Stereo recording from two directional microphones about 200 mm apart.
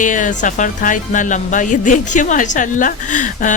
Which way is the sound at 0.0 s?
40° left (ahead or behind).